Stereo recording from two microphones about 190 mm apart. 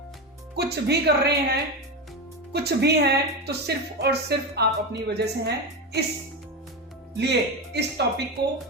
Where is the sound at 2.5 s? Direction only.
60° right (ahead or behind).